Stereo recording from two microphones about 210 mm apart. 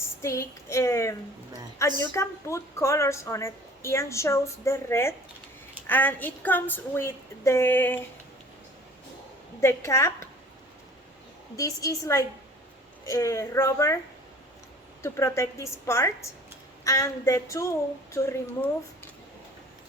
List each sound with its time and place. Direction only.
0.2 s a woman's voice: 15° left (ahead or behind)
9.6 s a woman's voice: 15° left (ahead or behind)
11.5 s a woman's voice: 15° left (ahead or behind)
15.0 s a woman's voice: 10° left (ahead or behind)